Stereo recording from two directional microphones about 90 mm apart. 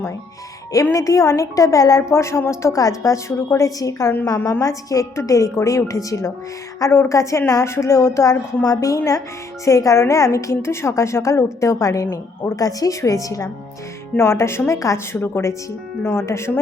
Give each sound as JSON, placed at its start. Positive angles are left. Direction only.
{"t": 0.9, "sound": "a woman's voice", "side_deg": 35}